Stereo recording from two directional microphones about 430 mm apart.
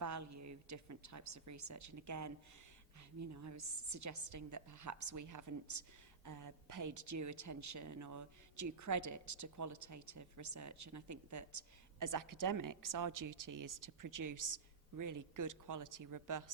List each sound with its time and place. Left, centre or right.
0.0 s a woman's voice: right